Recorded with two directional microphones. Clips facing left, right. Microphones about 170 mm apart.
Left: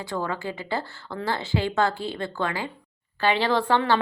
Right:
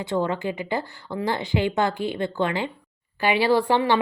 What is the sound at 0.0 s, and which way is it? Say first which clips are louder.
Speech: right 5 dB; 20° right (ahead or behind).